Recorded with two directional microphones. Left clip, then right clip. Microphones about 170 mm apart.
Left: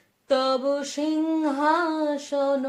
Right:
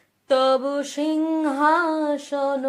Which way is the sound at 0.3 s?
40° right (ahead or behind).